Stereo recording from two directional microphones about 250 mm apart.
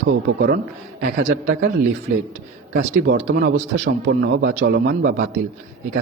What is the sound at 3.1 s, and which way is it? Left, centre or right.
Speech, right.